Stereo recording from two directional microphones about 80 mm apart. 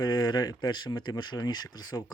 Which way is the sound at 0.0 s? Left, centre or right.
Left.